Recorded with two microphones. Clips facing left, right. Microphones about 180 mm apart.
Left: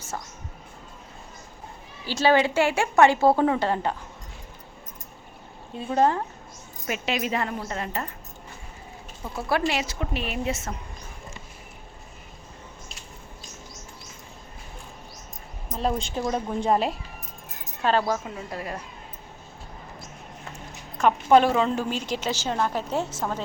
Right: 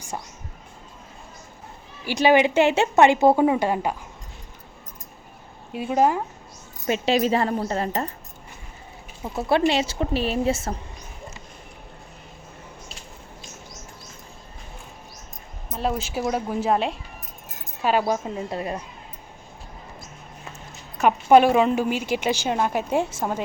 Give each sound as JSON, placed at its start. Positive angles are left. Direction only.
{"t": 2.0, "sound": "a woman's voice", "side_deg": -15}
{"t": 5.7, "sound": "a woman's voice", "side_deg": -10}
{"t": 6.8, "sound": "a woman's voice", "side_deg": -30}
{"t": 9.3, "sound": "a woman's voice", "side_deg": -25}
{"t": 15.7, "sound": "speech", "side_deg": -5}
{"t": 17.8, "sound": "a woman's voice", "side_deg": -15}
{"t": 21.0, "sound": "a woman's voice", "side_deg": -10}